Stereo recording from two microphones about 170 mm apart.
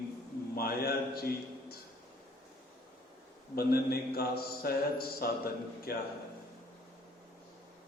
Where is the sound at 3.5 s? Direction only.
65° left (ahead or behind).